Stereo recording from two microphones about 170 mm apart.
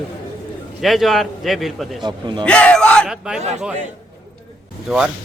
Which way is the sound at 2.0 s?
25° right (ahead or behind).